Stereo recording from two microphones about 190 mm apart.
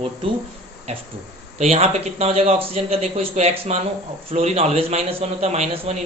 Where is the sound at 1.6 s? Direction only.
30° right (ahead or behind).